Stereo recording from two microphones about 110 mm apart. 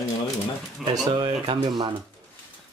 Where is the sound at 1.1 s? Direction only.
45° right (ahead or behind).